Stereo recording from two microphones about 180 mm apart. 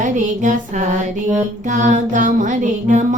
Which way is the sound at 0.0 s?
45° right (ahead or behind).